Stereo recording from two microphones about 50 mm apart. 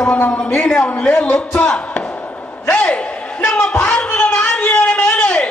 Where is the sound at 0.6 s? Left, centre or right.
Centre.